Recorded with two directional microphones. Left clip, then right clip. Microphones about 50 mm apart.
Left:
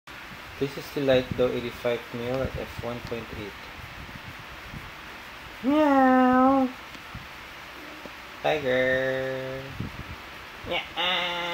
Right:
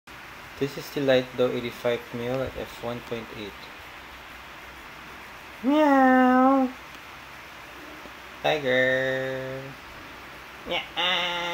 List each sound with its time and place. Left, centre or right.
0.6 s speech: centre
5.7 s speech: centre
8.4 s speech: centre
10.7 s a sound: centre